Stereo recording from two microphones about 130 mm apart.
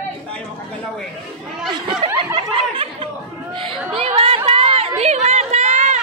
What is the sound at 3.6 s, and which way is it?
Chatter, 45° right (ahead or behind).